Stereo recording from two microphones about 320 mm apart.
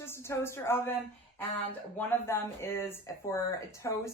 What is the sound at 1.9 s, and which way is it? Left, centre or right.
A woman's voice, centre.